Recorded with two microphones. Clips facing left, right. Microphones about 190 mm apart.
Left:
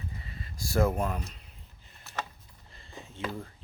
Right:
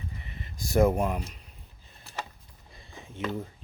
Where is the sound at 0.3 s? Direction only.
20° right (ahead or behind).